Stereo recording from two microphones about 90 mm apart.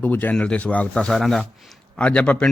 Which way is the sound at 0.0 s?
20° left (ahead or behind).